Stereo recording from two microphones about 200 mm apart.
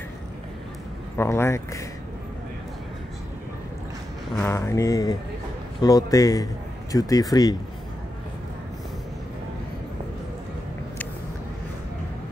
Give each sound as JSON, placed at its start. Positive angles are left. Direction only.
{"t": 1.1, "sound": "a man's voice", "side_deg": 10}
{"t": 4.4, "sound": "a man's voice", "side_deg": 10}